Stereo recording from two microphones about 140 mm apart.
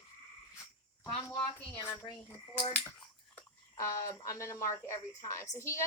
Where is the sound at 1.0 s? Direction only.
20° left (ahead or behind).